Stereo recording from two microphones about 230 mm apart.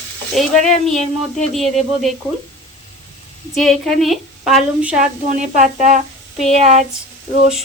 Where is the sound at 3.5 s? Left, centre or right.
Centre.